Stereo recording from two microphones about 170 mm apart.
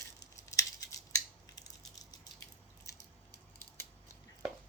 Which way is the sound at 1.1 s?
20° left (ahead or behind).